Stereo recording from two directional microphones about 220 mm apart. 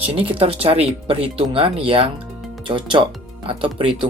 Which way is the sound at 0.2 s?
25° right (ahead or behind).